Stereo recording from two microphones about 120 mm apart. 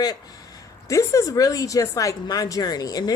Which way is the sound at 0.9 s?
25° left (ahead or behind).